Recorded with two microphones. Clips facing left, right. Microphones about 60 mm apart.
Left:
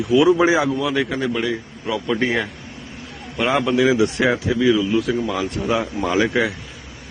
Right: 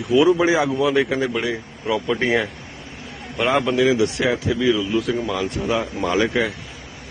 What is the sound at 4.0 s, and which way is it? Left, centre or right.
Speech, left.